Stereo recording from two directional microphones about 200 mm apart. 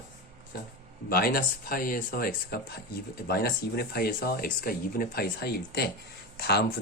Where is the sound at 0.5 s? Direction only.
50° left (ahead or behind).